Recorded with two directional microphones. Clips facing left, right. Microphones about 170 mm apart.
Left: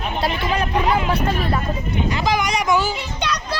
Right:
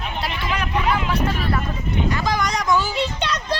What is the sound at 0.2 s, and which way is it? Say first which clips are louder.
Speech: left 5 dB; 30° left (ahead or behind).